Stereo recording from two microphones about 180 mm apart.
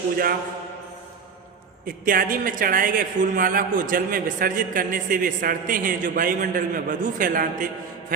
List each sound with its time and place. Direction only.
1.9 s a man's voice: 50° right (ahead or behind)